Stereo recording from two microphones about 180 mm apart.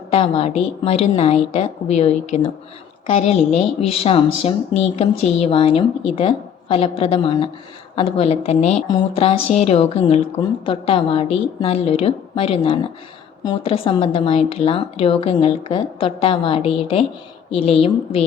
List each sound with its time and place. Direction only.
0.1 s speech: 30° left (ahead or behind)